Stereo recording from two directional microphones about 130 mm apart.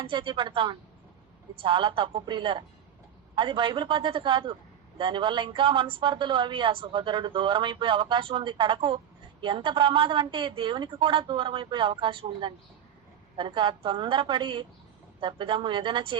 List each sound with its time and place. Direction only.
0.0 s speech: 40° right (ahead or behind)